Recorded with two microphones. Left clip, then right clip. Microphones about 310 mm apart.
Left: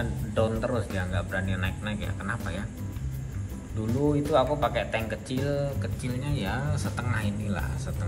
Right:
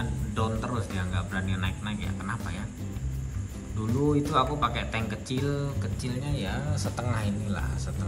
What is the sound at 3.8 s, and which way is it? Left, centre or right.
Speech, centre.